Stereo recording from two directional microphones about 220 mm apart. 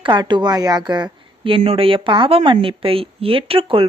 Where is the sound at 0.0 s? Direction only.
20° right (ahead or behind).